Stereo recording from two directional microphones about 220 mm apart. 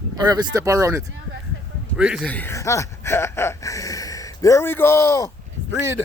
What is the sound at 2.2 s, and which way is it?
Speech, 5° left (ahead or behind).